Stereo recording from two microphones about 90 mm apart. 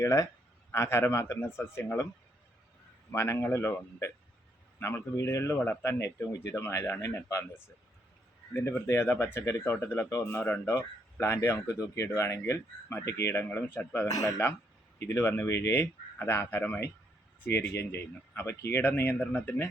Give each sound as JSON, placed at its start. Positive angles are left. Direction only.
{"t": 0.0, "sound": "speech", "side_deg": 40}
{"t": 3.1, "sound": "speech", "side_deg": 30}
{"t": 8.5, "sound": "speech", "side_deg": 30}